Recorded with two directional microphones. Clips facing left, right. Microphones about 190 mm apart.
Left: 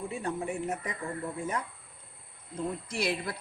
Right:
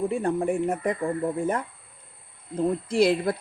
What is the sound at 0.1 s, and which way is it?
Speech, 50° right (ahead or behind).